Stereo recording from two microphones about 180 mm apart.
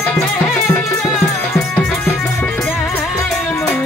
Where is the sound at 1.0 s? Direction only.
Centre (ahead or behind).